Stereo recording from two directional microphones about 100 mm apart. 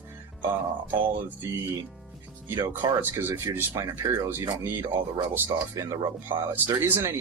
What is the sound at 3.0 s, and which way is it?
Speech, 25° right (ahead or behind).